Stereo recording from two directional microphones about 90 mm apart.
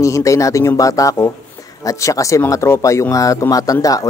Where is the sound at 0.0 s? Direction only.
35° left (ahead or behind).